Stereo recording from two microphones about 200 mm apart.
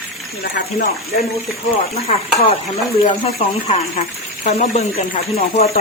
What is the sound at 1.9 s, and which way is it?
Speech, 30° left (ahead or behind).